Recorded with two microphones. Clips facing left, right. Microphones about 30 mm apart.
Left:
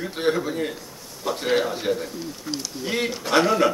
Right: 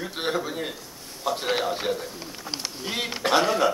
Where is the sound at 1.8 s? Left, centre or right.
Centre.